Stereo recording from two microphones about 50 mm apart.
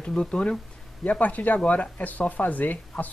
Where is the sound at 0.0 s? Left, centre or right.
Centre.